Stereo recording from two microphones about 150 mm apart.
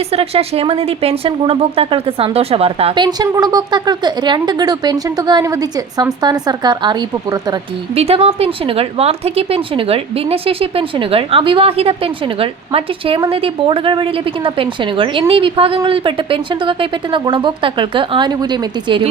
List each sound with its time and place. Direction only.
0.1 s a woman's voice: 40° right (ahead or behind)
7.9 s a woman's voice: 40° right (ahead or behind)